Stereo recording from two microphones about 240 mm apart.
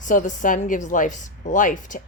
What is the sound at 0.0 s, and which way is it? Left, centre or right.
A woman's voice, left.